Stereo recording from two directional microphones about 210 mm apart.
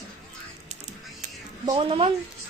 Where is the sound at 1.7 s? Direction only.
25° right (ahead or behind).